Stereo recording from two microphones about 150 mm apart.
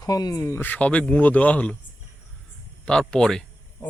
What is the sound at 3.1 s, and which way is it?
Speech, 5° left (ahead or behind).